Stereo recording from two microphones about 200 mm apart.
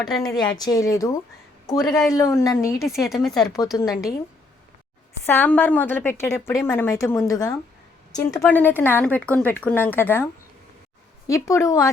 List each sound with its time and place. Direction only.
0.0 s a woman's voice: centre (ahead or behind)
0.3 s a woman's voice: 20° left (ahead or behind)
1.8 s a woman's voice: centre (ahead or behind)
2.1 s a woman's voice: 15° left (ahead or behind)
2.7 s a woman's voice: centre (ahead or behind)
3.7 s a woman's voice: 20° left (ahead or behind)
5.2 s a woman's voice: 10° left (ahead or behind)
8.4 s a woman's voice: 10° left (ahead or behind)
11.3 s a woman's voice: 15° left (ahead or behind)